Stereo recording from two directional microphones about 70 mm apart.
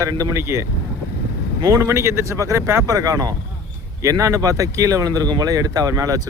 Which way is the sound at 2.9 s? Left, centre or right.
Right.